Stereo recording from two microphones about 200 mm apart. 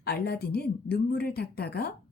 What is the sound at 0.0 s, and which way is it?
A woman's voice, 50° left (ahead or behind).